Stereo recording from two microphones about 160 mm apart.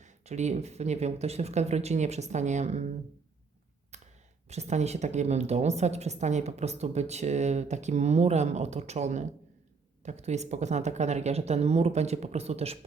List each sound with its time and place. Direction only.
0.0 s speech: 45° right (ahead or behind)
3.9 s speech: 45° right (ahead or behind)